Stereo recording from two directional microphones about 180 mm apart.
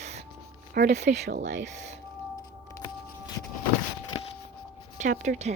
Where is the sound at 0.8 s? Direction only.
55° right (ahead or behind).